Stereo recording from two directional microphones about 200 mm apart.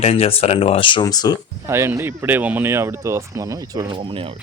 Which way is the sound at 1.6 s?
10° right (ahead or behind).